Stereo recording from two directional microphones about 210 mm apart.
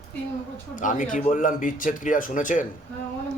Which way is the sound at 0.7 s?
40° left (ahead or behind).